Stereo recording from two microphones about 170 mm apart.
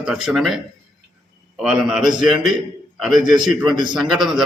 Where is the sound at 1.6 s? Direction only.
5° right (ahead or behind).